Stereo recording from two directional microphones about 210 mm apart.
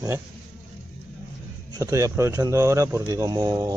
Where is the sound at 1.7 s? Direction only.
15° right (ahead or behind).